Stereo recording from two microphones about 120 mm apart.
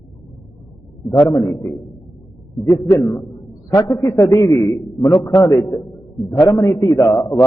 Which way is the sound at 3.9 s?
25° left (ahead or behind).